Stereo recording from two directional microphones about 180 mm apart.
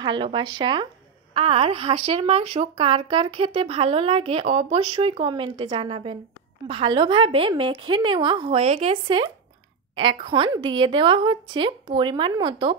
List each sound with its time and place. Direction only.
0.0 s a woman's voice: 25° right (ahead or behind)